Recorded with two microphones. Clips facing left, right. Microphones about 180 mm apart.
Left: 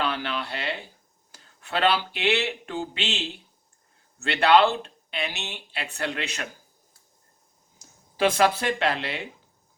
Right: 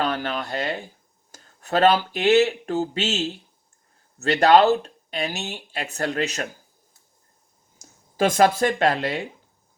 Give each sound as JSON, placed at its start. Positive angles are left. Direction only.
{"t": 0.0, "sound": "a sound", "side_deg": -45}
{"t": 1.3, "sound": "speech", "side_deg": -45}
{"t": 7.8, "sound": "speech", "side_deg": -45}